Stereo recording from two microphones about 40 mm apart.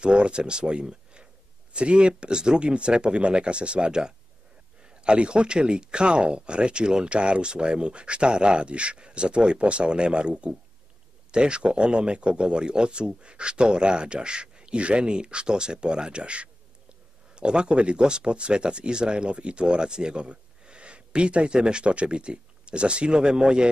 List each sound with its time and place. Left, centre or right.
0.0 s speech: right